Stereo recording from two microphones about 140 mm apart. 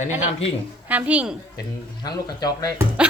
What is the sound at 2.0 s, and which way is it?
Speech, 30° left (ahead or behind).